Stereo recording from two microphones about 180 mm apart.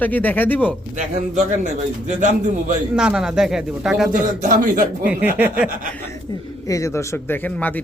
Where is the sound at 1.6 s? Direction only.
40° right (ahead or behind).